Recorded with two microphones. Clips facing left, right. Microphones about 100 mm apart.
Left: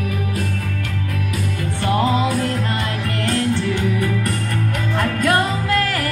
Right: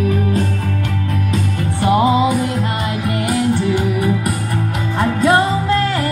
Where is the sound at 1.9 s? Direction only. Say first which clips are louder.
Right 5 dB; 15° right (ahead or behind).